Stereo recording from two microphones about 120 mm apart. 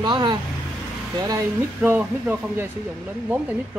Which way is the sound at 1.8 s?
15° right (ahead or behind).